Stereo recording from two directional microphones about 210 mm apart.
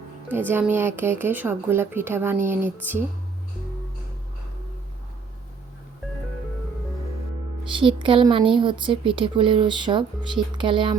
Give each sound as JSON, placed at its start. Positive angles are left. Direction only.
{"t": 0.3, "sound": "speech", "side_deg": -10}
{"t": 7.7, "sound": "speech", "side_deg": -25}